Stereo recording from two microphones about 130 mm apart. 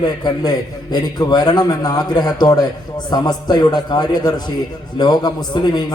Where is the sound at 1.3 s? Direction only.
30° left (ahead or behind).